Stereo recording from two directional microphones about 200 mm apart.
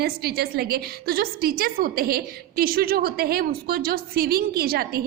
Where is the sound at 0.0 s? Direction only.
50° right (ahead or behind).